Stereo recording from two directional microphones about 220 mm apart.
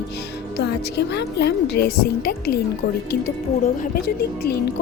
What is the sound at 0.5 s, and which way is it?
Speech, 50° left (ahead or behind).